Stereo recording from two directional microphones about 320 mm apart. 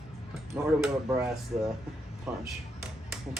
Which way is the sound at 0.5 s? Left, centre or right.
Centre.